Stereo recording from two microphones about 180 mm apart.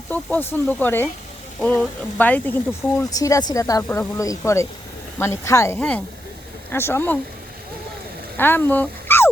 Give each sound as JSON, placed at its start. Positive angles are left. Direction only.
{"t": 0.1, "sound": "speech", "side_deg": 10}
{"t": 8.4, "sound": "speech", "side_deg": 10}